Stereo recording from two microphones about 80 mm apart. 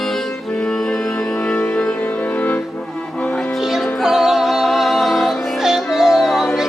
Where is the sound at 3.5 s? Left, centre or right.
Centre.